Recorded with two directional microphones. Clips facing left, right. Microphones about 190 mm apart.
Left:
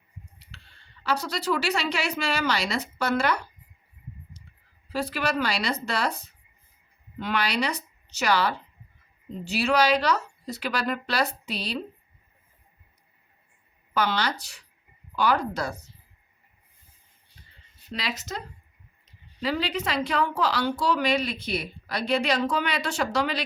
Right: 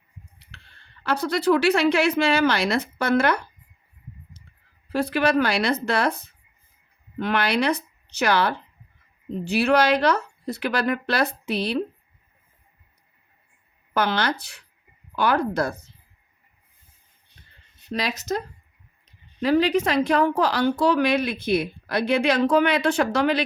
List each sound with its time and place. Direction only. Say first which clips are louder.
0.3 s speech: even; 55° right (ahead or behind)
4.9 s a woman's voice: right 6 dB; 55° right (ahead or behind)
13.9 s a woman's voice: right 3 dB; 55° right (ahead or behind)
17.9 s a woman's voice: right 7 dB; 45° right (ahead or behind)